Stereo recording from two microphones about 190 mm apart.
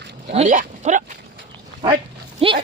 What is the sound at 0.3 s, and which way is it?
Speech, 40° right (ahead or behind).